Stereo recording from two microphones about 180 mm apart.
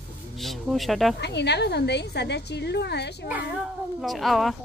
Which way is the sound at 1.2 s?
70° left (ahead or behind).